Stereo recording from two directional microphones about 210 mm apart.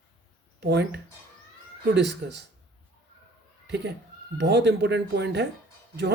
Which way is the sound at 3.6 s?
55° right (ahead or behind).